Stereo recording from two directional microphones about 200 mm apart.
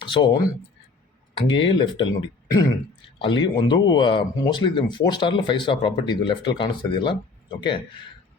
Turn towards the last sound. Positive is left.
turn(degrees=25)  # may be behind; listen again after turning